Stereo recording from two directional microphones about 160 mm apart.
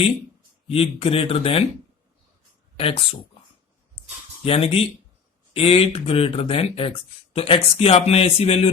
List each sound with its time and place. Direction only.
0.7 s speech: 35° left (ahead or behind)
2.7 s speech: 35° left (ahead or behind)
4.4 s speech: 35° left (ahead or behind)